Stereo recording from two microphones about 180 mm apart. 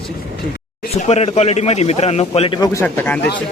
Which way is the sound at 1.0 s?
40° left (ahead or behind).